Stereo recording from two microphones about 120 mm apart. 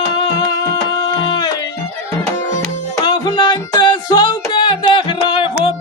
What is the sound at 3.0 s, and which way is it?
Music, 40° left (ahead or behind).